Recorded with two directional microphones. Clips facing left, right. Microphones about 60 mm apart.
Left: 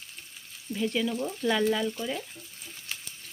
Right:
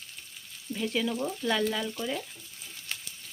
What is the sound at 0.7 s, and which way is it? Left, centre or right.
Frying, centre.